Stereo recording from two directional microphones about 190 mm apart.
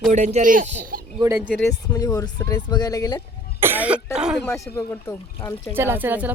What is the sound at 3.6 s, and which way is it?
Speech, 10° right (ahead or behind).